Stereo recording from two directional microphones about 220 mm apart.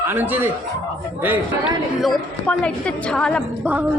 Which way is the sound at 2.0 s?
Centre (ahead or behind).